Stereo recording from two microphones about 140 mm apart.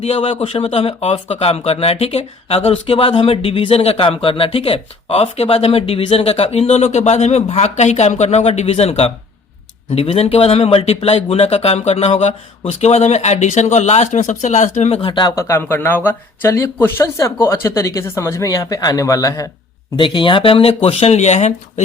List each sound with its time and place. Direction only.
0.0 s a man's voice: 45° left (ahead or behind)
15.4 s speech: 20° left (ahead or behind)
20.0 s speech: 35° left (ahead or behind); by 21.5 s 55° left (ahead or behind)